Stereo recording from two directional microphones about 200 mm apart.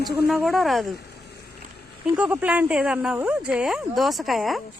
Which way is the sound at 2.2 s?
5° right (ahead or behind).